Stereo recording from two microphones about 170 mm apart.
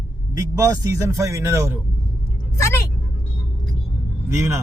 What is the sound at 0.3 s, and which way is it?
Speech, 20° right (ahead or behind).